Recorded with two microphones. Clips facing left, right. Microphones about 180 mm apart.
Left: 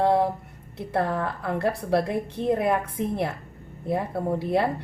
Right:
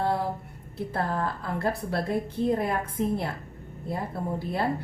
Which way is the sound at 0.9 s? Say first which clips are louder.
Left 4 dB; 70° left (ahead or behind).